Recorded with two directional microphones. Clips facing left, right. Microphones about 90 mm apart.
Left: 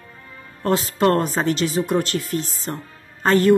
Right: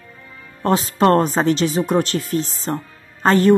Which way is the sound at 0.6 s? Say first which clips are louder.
Right 3 dB; 30° right (ahead or behind).